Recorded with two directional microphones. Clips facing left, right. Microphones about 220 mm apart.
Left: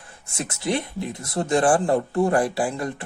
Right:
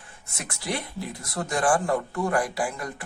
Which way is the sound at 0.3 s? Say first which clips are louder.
Left 6 dB; 25° left (ahead or behind).